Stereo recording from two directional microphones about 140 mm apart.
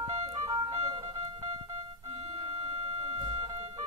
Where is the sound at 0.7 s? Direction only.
45° right (ahead or behind).